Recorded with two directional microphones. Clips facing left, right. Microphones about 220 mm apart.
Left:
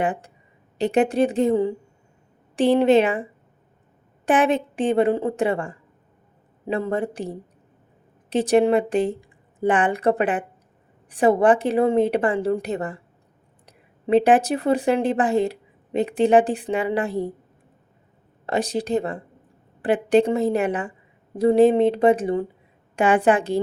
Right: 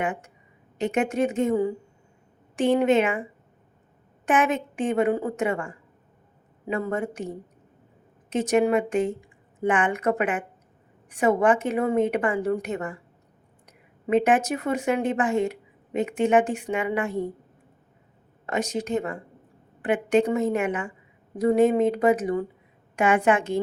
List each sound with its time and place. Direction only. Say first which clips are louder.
0.0 s a woman's voice: left 4 dB; 35° left (ahead or behind)
4.3 s a woman's voice: left 4 dB; 35° left (ahead or behind)
18.4 s a woman's voice: left 3 dB; 35° left (ahead or behind)